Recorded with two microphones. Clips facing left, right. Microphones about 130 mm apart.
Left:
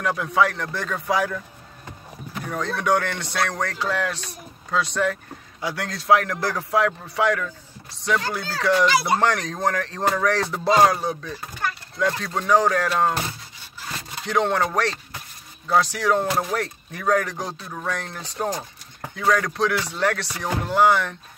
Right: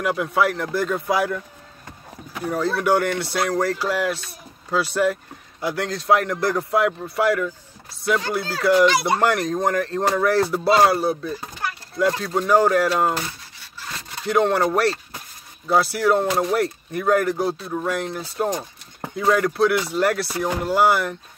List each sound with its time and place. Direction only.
0.0 s speech: 5° right (ahead or behind)
2.5 s speech: 5° right (ahead or behind)
14.2 s speech: 5° right (ahead or behind)